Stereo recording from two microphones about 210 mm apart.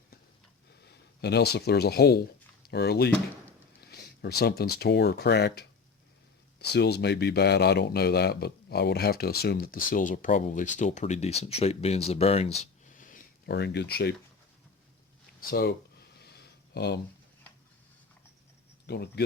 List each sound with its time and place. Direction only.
1.2 s speech: 50° left (ahead or behind)
15.4 s speech: 45° left (ahead or behind)
16.2 s a sound: 50° left (ahead or behind)
18.9 s speech: 50° left (ahead or behind)